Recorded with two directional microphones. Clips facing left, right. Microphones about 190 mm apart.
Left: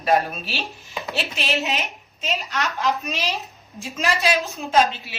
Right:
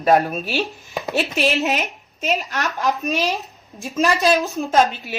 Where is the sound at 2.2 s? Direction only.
45° right (ahead or behind).